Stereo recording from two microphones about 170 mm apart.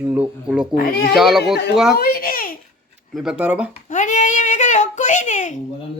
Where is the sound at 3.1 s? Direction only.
Centre (ahead or behind).